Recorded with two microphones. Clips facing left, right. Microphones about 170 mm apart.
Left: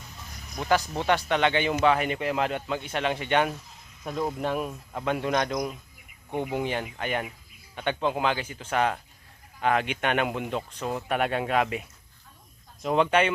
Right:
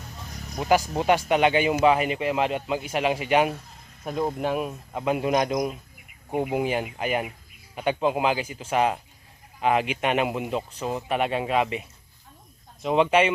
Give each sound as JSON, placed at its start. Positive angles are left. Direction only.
{"t": 0.9, "sound": "speech", "side_deg": -15}